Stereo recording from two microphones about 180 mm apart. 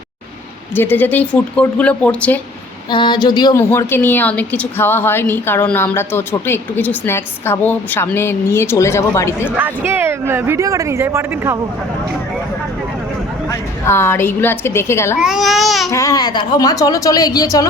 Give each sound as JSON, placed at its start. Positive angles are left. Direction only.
{"t": 0.8, "sound": "a woman's voice", "side_deg": 10}
{"t": 2.9, "sound": "a woman's voice", "side_deg": 25}
{"t": 9.6, "sound": "speech", "side_deg": -10}
{"t": 13.5, "sound": "a woman's voice", "side_deg": 15}
{"t": 15.2, "sound": "speech", "side_deg": 0}
{"t": 15.9, "sound": "a woman's voice", "side_deg": 15}